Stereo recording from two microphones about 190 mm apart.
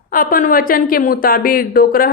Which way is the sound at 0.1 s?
45° left (ahead or behind).